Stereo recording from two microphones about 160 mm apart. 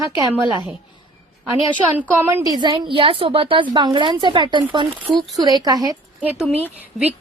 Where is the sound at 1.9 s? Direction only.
10° right (ahead or behind).